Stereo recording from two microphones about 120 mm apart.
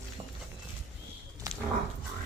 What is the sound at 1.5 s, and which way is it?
Wild animals, 30° right (ahead or behind).